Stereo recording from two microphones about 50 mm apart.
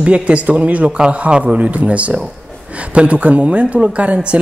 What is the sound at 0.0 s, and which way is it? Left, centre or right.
Speech, right.